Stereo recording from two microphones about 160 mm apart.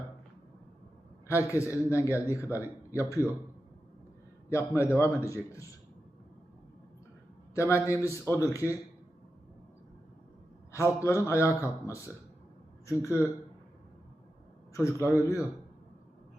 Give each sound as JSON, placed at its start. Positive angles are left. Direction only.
{"t": 1.5, "sound": "a man's voice", "side_deg": 20}
{"t": 4.4, "sound": "a man's voice", "side_deg": 15}
{"t": 7.5, "sound": "a man's voice", "side_deg": 15}
{"t": 10.7, "sound": "a man's voice", "side_deg": 15}
{"t": 14.7, "sound": "a man's voice", "side_deg": 20}